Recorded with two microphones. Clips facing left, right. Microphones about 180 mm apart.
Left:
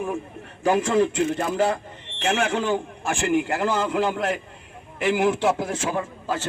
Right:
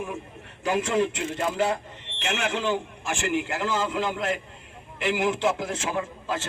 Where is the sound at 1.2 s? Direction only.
50° left (ahead or behind).